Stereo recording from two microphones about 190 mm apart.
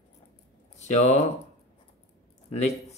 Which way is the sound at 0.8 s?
35° left (ahead or behind).